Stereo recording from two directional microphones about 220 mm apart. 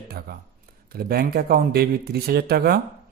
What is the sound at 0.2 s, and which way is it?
Speech, 45° right (ahead or behind).